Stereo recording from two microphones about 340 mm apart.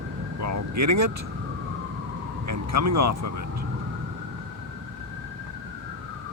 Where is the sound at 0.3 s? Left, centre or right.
Right.